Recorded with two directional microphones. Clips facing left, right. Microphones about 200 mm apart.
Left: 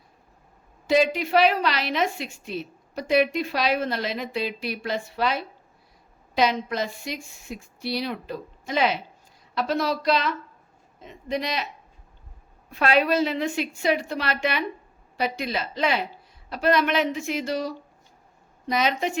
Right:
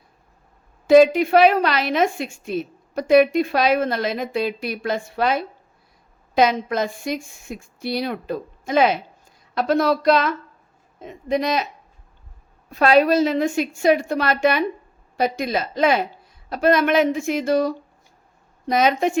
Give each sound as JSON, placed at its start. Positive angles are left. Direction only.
{"t": 0.9, "sound": "a woman's voice", "side_deg": -50}
{"t": 12.7, "sound": "a woman's voice", "side_deg": -40}